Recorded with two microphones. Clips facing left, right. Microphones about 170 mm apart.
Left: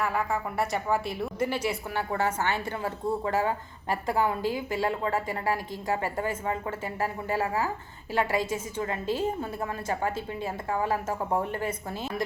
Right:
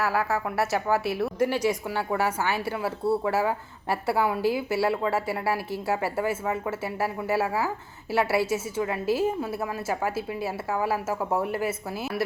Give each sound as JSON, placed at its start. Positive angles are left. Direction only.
{"t": 0.0, "sound": "speech", "side_deg": -75}
{"t": 0.5, "sound": "a woman's voice", "side_deg": -5}